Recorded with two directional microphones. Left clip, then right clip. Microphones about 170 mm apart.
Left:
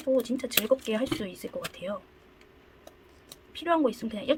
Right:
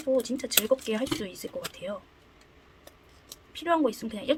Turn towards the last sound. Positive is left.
turn(degrees=0)  # may be behind; listen again after turning